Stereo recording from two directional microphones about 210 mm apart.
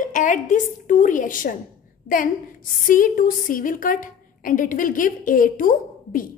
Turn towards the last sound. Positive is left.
turn(degrees=40)  # may be behind; listen again after turning